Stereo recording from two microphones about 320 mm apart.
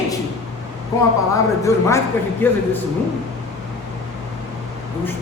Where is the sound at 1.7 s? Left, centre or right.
Centre.